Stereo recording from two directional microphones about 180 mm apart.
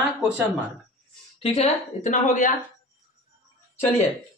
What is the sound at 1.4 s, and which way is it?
A man's voice, 35° left (ahead or behind).